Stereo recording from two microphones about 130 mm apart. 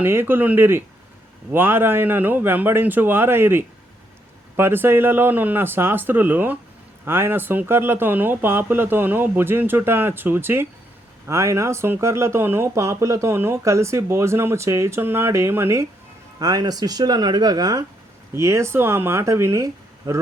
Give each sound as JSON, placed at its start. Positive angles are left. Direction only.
{"t": 0.0, "sound": "speech", "side_deg": -15}